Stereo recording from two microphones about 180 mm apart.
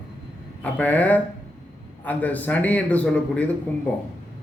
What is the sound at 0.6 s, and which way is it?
A man's voice, 10° left (ahead or behind).